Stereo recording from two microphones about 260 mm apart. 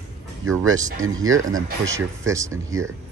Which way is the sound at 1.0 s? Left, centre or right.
Right.